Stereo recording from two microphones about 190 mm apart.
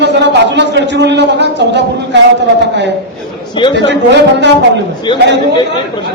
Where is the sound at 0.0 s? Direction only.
65° right (ahead or behind).